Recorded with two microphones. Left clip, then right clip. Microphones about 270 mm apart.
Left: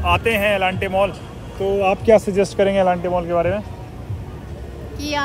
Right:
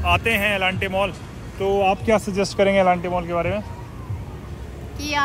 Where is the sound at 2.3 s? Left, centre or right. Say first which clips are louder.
Left 1 dB; right.